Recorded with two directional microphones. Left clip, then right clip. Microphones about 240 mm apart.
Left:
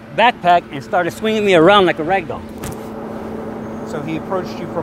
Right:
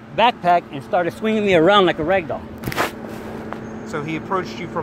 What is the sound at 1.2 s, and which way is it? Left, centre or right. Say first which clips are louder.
Speech: left 3 dB; right.